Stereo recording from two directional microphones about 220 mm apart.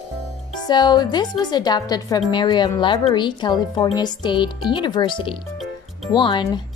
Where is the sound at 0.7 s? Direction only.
20° left (ahead or behind).